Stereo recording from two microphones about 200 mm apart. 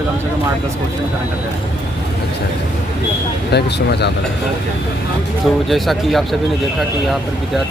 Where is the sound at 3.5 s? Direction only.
55° left (ahead or behind).